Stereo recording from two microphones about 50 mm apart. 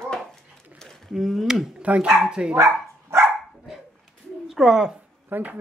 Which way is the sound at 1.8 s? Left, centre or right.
Right.